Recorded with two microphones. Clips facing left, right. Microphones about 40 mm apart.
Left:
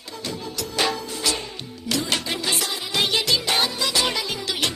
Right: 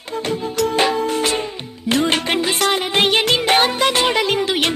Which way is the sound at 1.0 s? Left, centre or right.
Right.